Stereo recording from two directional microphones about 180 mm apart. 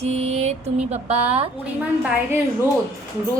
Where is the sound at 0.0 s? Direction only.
35° right (ahead or behind).